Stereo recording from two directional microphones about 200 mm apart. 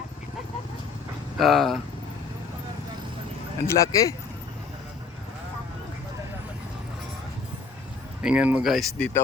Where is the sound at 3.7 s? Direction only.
15° left (ahead or behind).